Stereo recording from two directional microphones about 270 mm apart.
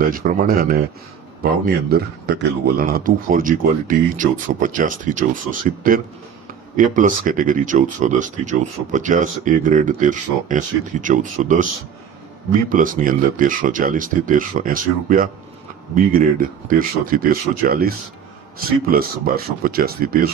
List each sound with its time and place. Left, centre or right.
0.1 s a man's voice: right
12.6 s a man's voice: right